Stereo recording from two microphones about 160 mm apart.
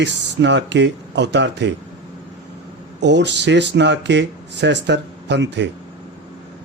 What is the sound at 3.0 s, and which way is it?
Speech, 90° right.